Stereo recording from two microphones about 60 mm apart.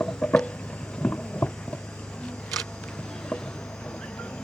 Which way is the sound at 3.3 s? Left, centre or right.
Centre.